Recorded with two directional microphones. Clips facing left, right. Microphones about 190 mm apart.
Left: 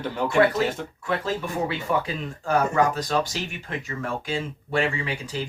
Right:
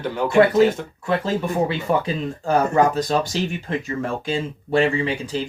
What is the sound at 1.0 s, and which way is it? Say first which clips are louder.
Speech: right 5 dB; 25° right (ahead or behind).